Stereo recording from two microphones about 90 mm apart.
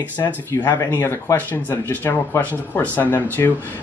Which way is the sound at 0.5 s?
30° left (ahead or behind).